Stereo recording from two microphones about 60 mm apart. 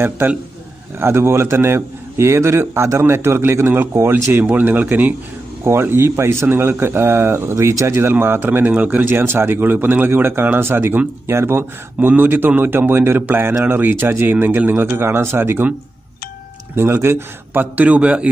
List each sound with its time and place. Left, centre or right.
0.9 s a man's voice: right
5.6 s speech: right
16.7 s a man's voice: right
17.7 s speech: right